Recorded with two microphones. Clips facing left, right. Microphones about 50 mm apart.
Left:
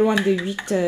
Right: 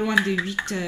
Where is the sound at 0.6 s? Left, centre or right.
Centre.